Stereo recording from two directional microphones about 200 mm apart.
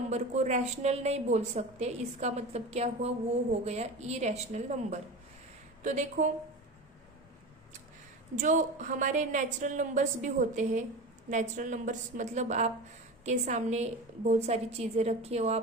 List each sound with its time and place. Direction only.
0.1 s a woman's voice: 35° right (ahead or behind)
8.4 s a woman's voice: 40° right (ahead or behind)